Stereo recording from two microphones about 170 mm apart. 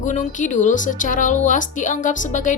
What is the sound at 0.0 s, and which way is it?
A woman's voice, 45° left (ahead or behind).